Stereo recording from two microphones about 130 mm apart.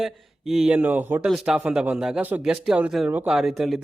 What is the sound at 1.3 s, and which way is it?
A man's voice, 5° right (ahead or behind).